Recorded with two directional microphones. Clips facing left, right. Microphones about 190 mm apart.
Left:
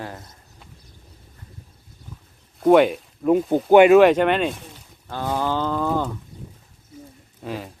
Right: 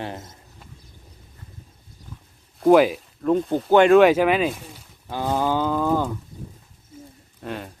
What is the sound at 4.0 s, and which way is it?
Speech, centre (ahead or behind).